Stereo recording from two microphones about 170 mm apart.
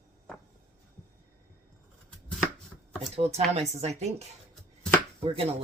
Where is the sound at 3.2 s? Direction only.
40° right (ahead or behind).